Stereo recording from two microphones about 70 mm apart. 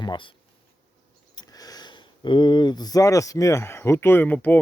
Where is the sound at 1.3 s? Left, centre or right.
Left.